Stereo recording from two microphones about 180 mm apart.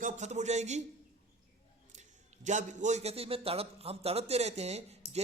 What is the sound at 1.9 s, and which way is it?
A man's voice, 40° right (ahead or behind).